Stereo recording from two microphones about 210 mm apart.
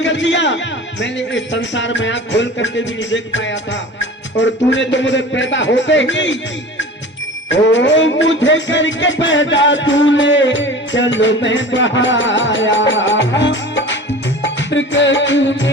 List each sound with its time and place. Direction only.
0.0 s speech: 60° left (ahead or behind)
14.4 s music: 60° left (ahead or behind)